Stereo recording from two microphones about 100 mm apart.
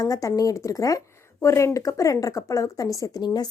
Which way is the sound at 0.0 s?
35° left (ahead or behind).